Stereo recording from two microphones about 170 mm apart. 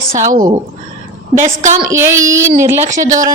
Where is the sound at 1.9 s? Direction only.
15° right (ahead or behind).